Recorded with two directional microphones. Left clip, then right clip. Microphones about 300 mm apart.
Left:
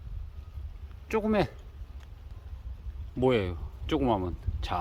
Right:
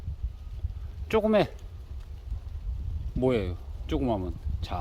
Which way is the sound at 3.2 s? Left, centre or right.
Centre.